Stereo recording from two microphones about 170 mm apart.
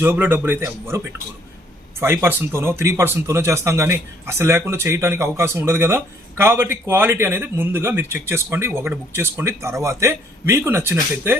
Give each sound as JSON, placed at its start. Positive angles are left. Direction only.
{"t": 0.0, "sound": "speech", "side_deg": -10}